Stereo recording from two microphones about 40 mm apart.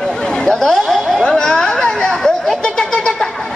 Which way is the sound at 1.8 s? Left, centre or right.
Centre.